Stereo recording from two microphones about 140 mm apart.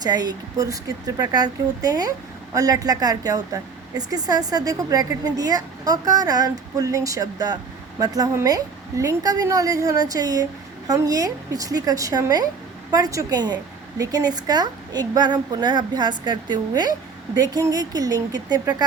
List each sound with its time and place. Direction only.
0.0 s speech: 30° right (ahead or behind)